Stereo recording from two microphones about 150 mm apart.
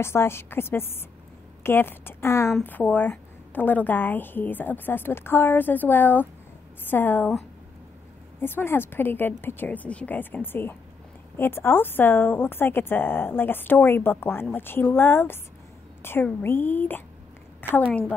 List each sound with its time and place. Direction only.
0.0 s a woman's voice: 15° left (ahead or behind)
8.4 s a woman's voice: 15° left (ahead or behind)